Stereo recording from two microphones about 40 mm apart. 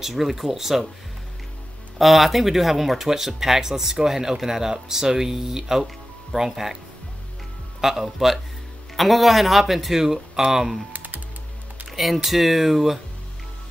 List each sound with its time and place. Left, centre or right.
0.0 s speech: centre
2.0 s speech: centre
7.8 s speech: centre
10.9 s typing: right
11.9 s speech: centre